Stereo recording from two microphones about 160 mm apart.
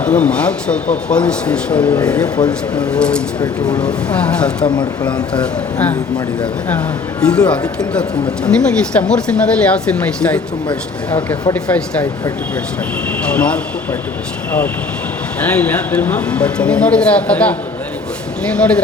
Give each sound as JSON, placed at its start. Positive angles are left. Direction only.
{"t": 0.0, "sound": "speech", "side_deg": 10}
{"t": 2.2, "sound": "speech", "side_deg": 25}
{"t": 2.5, "sound": "speech", "side_deg": 5}
{"t": 4.6, "sound": "speech", "side_deg": 30}
{"t": 5.1, "sound": "speech", "side_deg": 5}
{"t": 13.3, "sound": "speech", "side_deg": 5}
{"t": 15.5, "sound": "speech", "side_deg": 10}
{"t": 18.5, "sound": "speech", "side_deg": 5}